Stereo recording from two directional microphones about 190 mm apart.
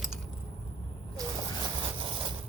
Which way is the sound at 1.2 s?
15° right (ahead or behind).